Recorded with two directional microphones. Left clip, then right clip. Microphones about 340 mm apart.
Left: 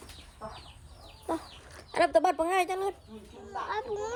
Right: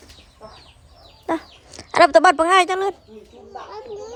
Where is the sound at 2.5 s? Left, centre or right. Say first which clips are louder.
Right 12 dB; right.